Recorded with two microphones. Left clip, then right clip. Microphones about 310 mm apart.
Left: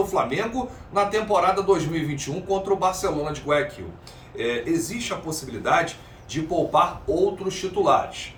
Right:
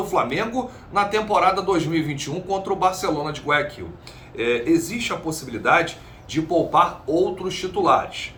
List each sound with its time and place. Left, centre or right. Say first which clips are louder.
0.1 s a man's voice: right 2 dB; centre